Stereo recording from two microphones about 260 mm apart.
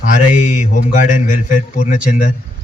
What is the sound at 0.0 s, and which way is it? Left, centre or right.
Speech, left.